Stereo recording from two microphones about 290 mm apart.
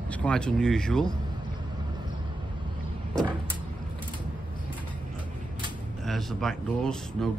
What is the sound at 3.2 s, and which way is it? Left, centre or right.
Vehicle, centre.